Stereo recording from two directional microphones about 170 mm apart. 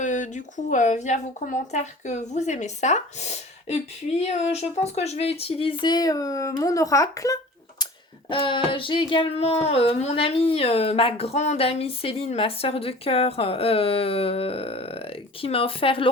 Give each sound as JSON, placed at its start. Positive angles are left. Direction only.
{"t": 0.0, "sound": "speech", "side_deg": 45}
{"t": 8.3, "sound": "speech", "side_deg": 30}